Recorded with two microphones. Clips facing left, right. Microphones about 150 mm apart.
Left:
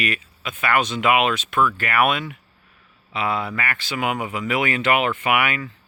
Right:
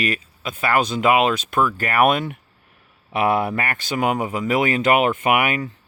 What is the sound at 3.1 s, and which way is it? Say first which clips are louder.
Speech: right 5 dB; 55° right (ahead or behind).